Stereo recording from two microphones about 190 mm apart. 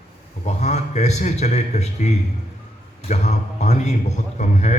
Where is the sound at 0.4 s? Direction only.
35° left (ahead or behind).